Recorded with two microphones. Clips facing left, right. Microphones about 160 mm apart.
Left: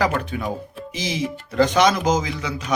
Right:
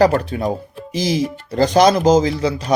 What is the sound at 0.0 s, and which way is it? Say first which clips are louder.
Speech: right 7 dB; 35° right (ahead or behind).